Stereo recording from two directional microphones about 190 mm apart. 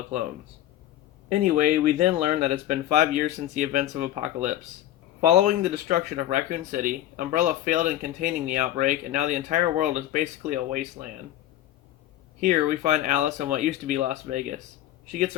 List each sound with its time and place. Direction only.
1.3 s speech: 45° right (ahead or behind)
12.4 s speech: 40° right (ahead or behind)